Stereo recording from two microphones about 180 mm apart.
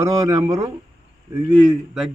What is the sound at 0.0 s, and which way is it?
Speech, 15° right (ahead or behind).